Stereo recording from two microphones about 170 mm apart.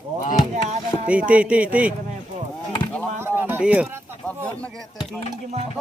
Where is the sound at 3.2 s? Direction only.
15° right (ahead or behind).